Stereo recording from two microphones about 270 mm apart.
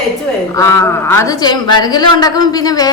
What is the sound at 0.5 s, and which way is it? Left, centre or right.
A woman's voice, centre.